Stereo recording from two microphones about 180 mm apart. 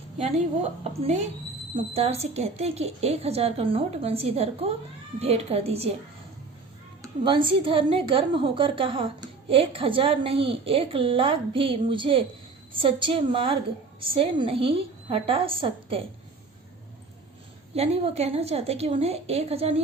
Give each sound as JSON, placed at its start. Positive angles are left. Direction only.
{"t": 1.0, "sound": "a woman's voice", "side_deg": -35}
{"t": 7.0, "sound": "a woman's voice", "side_deg": -25}
{"t": 17.7, "sound": "a woman's voice", "side_deg": -35}